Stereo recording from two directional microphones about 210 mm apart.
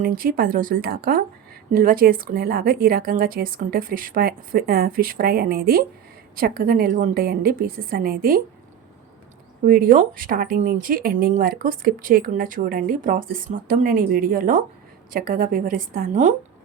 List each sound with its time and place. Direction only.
0.0 s a woman's voice: 45° right (ahead or behind)
9.6 s a woman's voice: 40° right (ahead or behind)